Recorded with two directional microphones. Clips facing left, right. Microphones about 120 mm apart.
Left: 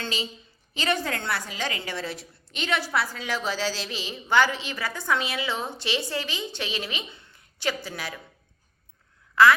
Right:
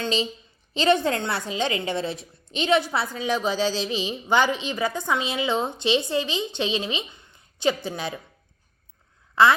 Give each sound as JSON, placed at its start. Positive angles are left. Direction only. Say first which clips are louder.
{"t": 0.0, "sound": "a woman's voice", "louder": "right 6 dB", "side_deg": -25}
{"t": 9.3, "sound": "quack", "louder": "even", "side_deg": -25}